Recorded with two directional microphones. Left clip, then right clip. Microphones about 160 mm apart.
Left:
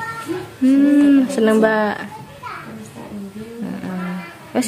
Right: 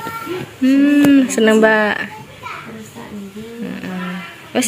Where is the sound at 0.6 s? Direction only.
5° left (ahead or behind).